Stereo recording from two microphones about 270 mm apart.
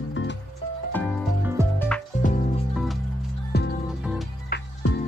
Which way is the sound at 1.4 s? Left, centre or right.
Centre.